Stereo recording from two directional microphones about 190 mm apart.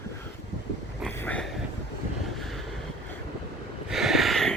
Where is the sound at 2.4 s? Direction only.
Centre (ahead or behind).